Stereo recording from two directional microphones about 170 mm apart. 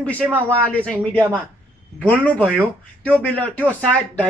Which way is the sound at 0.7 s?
10° left (ahead or behind).